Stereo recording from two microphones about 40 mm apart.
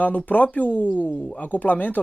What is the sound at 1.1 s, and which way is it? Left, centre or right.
Speech, left.